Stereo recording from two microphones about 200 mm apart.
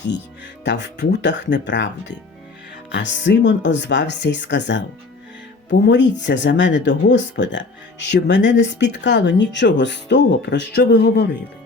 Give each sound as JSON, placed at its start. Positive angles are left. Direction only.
{"t": 0.6, "sound": "speech", "side_deg": 60}
{"t": 5.8, "sound": "speech", "side_deg": 60}